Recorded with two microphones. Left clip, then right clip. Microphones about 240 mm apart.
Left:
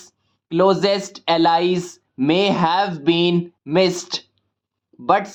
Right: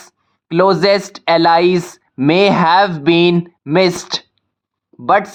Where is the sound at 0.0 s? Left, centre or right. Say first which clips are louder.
Right 6 dB; right.